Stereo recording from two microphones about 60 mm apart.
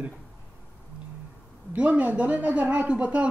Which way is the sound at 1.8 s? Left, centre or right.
Right.